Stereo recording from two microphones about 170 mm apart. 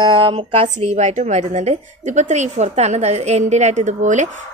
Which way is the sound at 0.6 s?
45° right (ahead or behind).